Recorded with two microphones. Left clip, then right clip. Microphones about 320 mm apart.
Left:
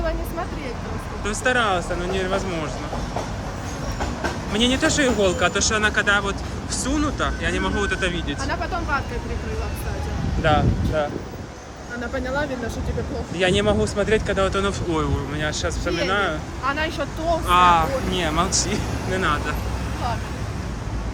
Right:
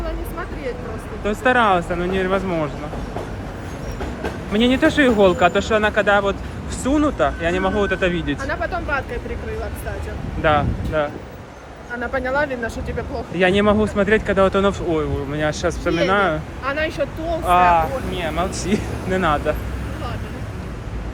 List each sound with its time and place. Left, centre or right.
1.2 s speech: centre
4.5 s speech: centre
8.4 s speech: centre
10.4 s speech: centre
12.1 s speech: centre
16.6 s speech: centre
18.5 s speech: centre